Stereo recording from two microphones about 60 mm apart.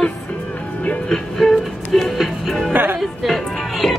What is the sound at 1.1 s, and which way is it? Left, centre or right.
A woman's voice, centre.